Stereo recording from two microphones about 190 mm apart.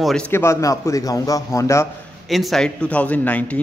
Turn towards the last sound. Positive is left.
turn(degrees=10)  # may be behind; listen again after turning